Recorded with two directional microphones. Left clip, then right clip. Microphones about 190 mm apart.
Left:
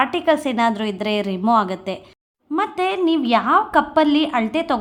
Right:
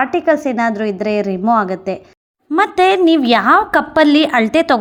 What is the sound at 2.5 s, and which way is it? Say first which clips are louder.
A woman's voice: right 9 dB; 25° right (ahead or behind).